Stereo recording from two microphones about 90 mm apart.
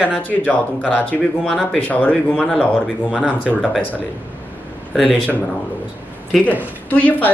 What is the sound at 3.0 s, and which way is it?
Speech, 10° right (ahead or behind).